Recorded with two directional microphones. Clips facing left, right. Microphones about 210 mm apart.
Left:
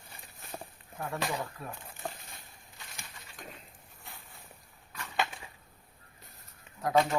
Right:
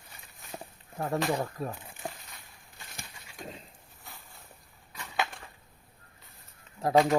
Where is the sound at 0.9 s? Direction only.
35° right (ahead or behind).